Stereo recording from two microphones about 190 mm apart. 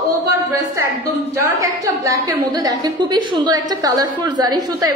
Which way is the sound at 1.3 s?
15° right (ahead or behind).